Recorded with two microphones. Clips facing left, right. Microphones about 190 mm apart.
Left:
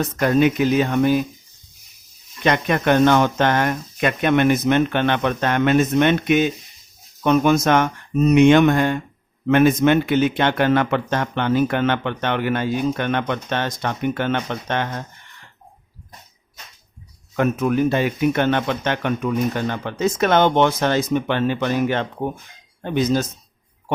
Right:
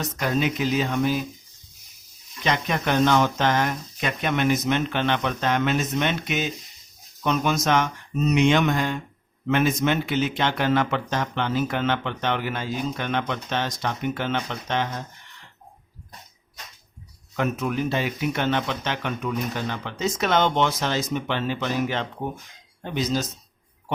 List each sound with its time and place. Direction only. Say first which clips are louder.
0.0 s speech: left 8 dB; 55° left (ahead or behind)
2.4 s speech: left 6 dB; 55° left (ahead or behind)
17.3 s speech: left 6 dB; 50° left (ahead or behind)